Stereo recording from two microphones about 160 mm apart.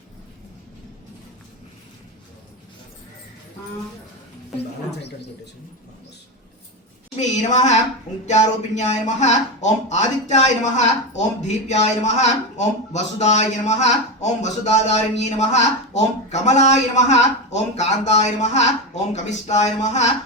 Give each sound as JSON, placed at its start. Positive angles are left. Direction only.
{"t": 7.2, "sound": "speech", "side_deg": 45}